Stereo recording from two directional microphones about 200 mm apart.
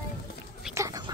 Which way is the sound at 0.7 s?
15° right (ahead or behind).